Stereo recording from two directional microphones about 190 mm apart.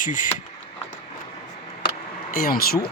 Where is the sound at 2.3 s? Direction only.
50° left (ahead or behind).